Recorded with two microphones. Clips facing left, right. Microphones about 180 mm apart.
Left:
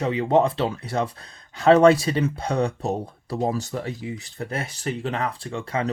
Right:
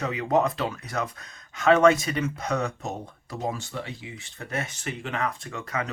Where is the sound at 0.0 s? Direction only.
30° left (ahead or behind).